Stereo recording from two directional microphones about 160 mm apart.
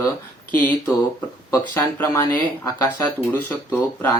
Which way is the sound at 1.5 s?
15° left (ahead or behind).